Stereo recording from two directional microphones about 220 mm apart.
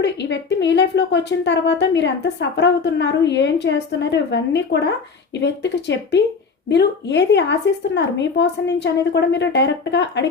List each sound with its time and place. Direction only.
0.0 s a woman's voice: 50° left (ahead or behind)